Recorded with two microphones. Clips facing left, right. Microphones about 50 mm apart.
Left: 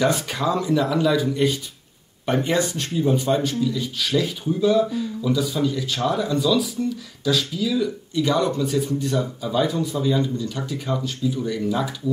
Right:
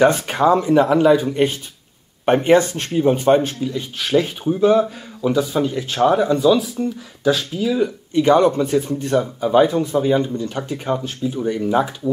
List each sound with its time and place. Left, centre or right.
0.0 s speech: right